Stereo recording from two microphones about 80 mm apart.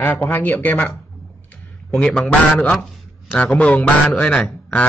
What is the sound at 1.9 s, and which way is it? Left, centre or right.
A man's voice, centre.